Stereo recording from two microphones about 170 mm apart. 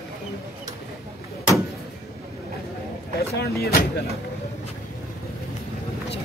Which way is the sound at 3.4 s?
65° left (ahead or behind).